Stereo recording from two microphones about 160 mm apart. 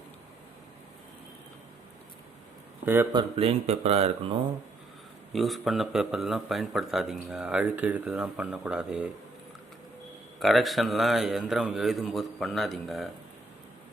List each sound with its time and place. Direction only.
2.8 s speech: 15° right (ahead or behind)
3.1 s speech: 30° right (ahead or behind)
5.3 s a man's voice: centre (ahead or behind)
10.4 s a man's voice: centre (ahead or behind)